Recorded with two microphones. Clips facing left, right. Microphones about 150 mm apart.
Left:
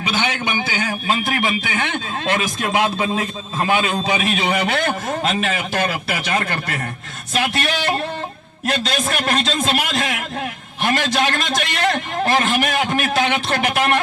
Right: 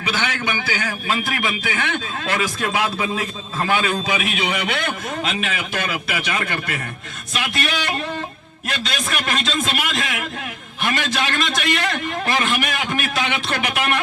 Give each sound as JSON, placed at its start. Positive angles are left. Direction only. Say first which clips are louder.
{"t": 0.1, "sound": "a man's voice", "louder": "left 1 dB", "side_deg": 25}
{"t": 3.9, "sound": "a man's voice", "louder": "left 3 dB", "side_deg": 30}
{"t": 10.9, "sound": "a man's voice", "louder": "left 3 dB", "side_deg": 40}